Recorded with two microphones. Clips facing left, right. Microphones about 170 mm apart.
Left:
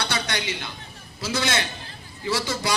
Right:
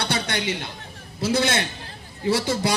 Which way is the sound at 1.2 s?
55° right (ahead or behind).